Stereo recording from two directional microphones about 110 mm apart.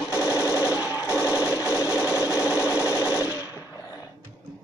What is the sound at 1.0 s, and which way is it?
Sewing machine, 25° left (ahead or behind).